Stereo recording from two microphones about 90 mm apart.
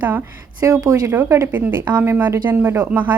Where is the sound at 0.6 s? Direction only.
40° right (ahead or behind).